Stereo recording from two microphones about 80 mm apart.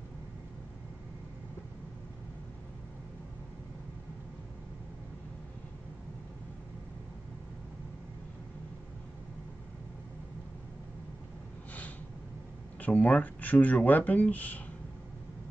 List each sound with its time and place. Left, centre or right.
12.8 s speech: centre